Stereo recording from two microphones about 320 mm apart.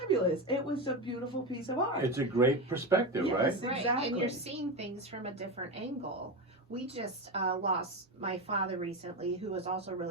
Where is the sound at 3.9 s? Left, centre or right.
Centre.